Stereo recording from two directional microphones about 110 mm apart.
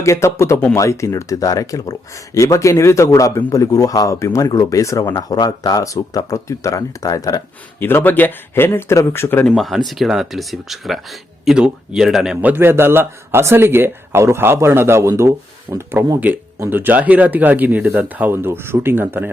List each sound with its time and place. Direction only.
0.0 s speech: 25° left (ahead or behind)
7.8 s speech: 20° left (ahead or behind)
9.5 s speech: centre (ahead or behind)
12.4 s a man's voice: 20° right (ahead or behind)
15.7 s speech: 35° right (ahead or behind)
16.6 s speech: 20° right (ahead or behind)